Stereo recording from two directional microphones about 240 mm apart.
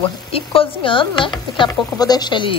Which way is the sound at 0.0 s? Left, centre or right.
Left.